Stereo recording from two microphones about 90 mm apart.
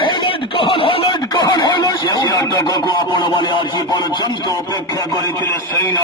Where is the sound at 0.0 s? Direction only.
65° left (ahead or behind).